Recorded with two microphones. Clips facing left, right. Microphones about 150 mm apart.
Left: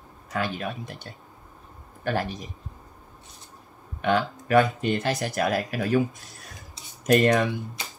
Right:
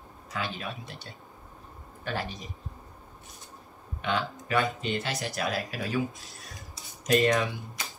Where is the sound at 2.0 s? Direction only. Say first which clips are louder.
Left 6 dB; 50° left (ahead or behind).